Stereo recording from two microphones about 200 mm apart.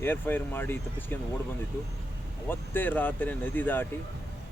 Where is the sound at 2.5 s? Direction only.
10° left (ahead or behind).